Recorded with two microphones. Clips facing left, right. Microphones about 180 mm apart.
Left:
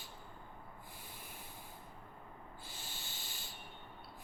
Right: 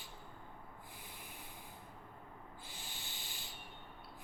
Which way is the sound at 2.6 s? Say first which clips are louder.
Left 1 dB; 15° right (ahead or behind).